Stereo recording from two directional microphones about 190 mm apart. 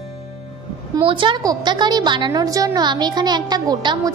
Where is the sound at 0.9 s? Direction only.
25° right (ahead or behind).